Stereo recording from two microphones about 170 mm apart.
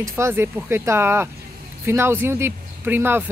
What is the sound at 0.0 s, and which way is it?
Speech, 15° right (ahead or behind).